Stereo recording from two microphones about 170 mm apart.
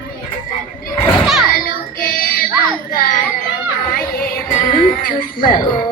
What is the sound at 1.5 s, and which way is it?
Child singing, 60° left (ahead or behind).